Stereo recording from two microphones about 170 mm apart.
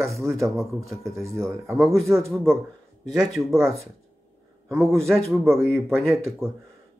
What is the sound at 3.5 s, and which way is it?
Speech, 15° right (ahead or behind).